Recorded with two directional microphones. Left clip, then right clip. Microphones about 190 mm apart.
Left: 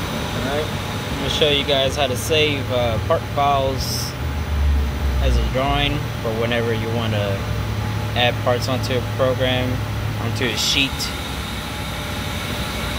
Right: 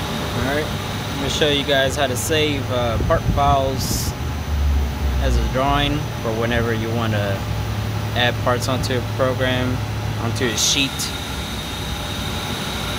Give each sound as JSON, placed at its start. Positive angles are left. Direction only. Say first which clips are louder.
{"t": 1.3, "sound": "speech", "louder": "even", "side_deg": -20}
{"t": 5.6, "sound": "speech", "louder": "right 1 dB", "side_deg": -20}
{"t": 8.2, "sound": "speech", "louder": "left 1 dB", "side_deg": -20}